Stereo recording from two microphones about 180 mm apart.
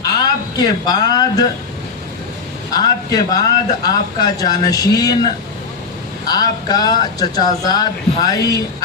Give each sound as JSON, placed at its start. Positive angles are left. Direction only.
{"t": 0.2, "sound": "speech", "side_deg": 20}
{"t": 2.7, "sound": "speech", "side_deg": 20}